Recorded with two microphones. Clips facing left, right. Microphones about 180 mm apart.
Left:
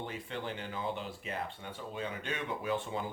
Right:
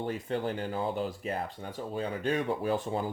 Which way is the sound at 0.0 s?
45° right (ahead or behind).